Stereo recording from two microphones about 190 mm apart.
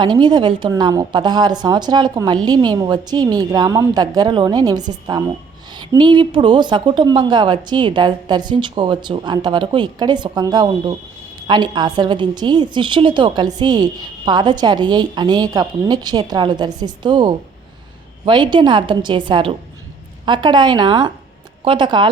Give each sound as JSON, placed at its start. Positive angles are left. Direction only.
{"t": 0.0, "sound": "a woman's voice", "side_deg": -25}